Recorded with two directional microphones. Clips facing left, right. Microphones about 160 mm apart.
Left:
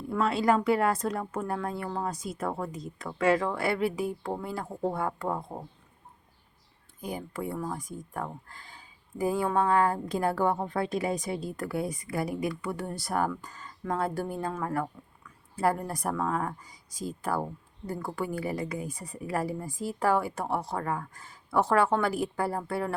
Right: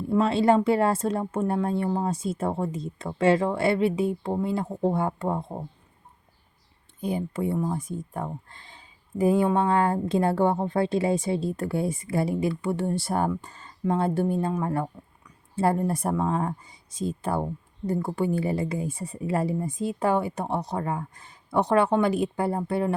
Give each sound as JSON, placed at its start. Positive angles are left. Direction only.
{"t": 0.1, "sound": "speech", "side_deg": -25}
{"t": 7.0, "sound": "speech", "side_deg": -25}